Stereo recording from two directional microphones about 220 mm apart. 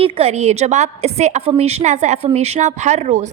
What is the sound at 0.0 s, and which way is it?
A woman's voice, 25° right (ahead or behind).